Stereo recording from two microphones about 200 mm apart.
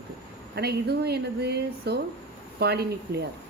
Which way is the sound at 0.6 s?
55° right (ahead or behind).